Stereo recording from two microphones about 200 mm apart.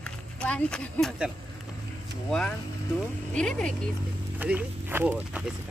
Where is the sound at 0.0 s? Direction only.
5° left (ahead or behind).